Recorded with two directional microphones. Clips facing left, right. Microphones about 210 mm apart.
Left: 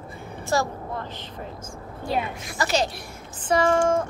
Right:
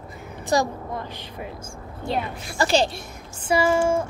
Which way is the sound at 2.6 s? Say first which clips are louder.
Right 4 dB; 30° right (ahead or behind).